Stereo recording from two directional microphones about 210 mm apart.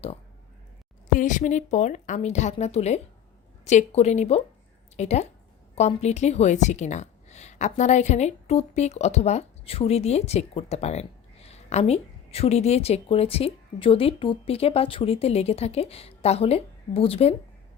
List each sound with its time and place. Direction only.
1.1 s a woman's voice: 40° left (ahead or behind)